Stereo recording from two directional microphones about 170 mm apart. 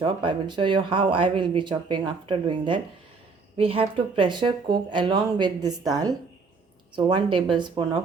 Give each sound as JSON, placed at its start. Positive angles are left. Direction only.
{"t": 0.0, "sound": "speech", "side_deg": -25}